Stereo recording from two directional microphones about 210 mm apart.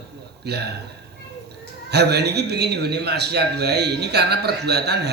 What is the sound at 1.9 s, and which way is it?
Speech, 50° right (ahead or behind).